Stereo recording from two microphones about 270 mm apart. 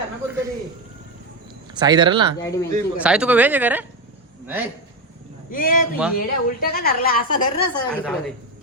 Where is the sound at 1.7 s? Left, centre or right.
Centre.